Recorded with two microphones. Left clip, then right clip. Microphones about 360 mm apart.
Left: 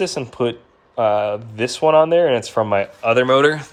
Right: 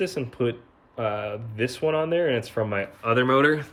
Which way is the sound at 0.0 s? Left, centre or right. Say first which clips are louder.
Left 6 dB; centre.